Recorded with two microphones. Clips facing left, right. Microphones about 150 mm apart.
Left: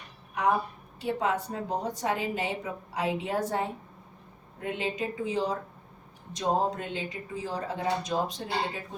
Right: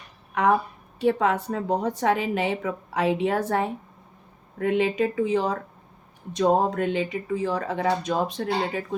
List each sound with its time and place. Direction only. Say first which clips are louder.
0.9 s a woman's voice: right 7 dB; 65° right (ahead or behind)